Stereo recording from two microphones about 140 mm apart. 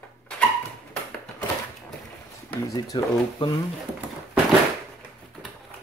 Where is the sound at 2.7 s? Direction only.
30° left (ahead or behind).